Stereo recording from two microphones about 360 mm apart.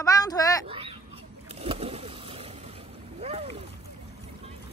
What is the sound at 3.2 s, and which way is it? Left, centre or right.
Boat, centre.